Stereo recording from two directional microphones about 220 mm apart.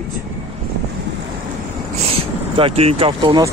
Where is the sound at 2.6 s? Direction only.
25° right (ahead or behind).